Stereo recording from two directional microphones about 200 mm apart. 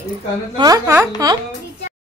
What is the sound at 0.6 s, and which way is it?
Speech, 20° right (ahead or behind).